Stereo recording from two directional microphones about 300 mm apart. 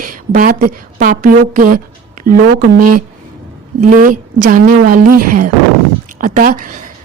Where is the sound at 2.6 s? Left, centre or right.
Right.